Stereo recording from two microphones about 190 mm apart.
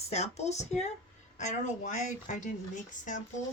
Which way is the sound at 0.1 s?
35° left (ahead or behind).